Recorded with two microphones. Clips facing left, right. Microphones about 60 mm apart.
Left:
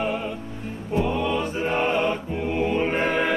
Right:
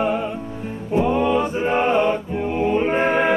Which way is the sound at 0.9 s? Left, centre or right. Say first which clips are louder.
Right 5 dB; right.